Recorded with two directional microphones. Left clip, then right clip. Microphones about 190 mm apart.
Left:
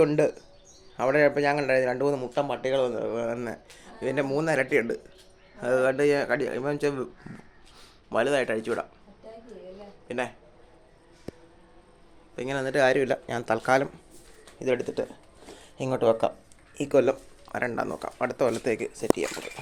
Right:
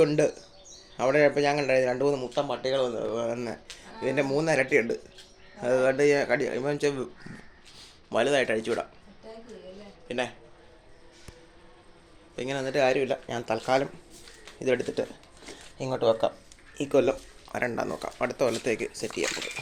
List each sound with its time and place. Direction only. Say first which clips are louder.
0.0 s speech: left 1 dB; 5° left (ahead or behind)
9.7 s a sound: even; 5° left (ahead or behind)
12.4 s speech: left 2 dB; 10° left (ahead or behind)
14.6 s speech: even; centre (ahead or behind)
15.8 s speech: left 1 dB; 25° left (ahead or behind)
16.7 s speech: left 1 dB; 15° left (ahead or behind)
18.3 s speech: left 1 dB; 15° left (ahead or behind)